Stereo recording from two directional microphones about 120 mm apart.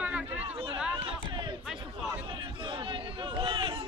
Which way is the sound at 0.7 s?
10° right (ahead or behind).